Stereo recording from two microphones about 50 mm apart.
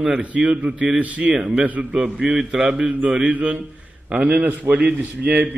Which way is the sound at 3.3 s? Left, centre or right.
Right.